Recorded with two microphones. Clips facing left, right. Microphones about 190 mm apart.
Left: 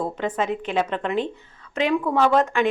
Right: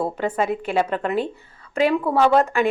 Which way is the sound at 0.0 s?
10° right (ahead or behind).